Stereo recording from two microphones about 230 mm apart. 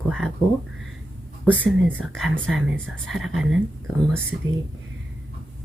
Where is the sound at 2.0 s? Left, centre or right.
Centre.